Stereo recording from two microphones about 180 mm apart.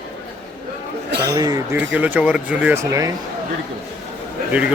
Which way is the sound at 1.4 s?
20° right (ahead or behind).